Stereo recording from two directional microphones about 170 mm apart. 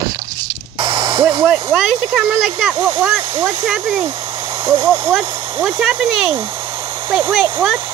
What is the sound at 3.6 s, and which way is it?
Speech, 10° right (ahead or behind).